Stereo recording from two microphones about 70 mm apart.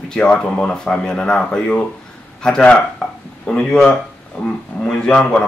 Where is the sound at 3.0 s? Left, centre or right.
Centre.